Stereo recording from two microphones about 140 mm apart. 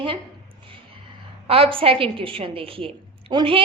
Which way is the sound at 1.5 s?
40° right (ahead or behind).